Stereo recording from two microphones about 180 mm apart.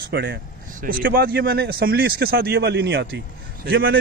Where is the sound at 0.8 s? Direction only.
55° right (ahead or behind).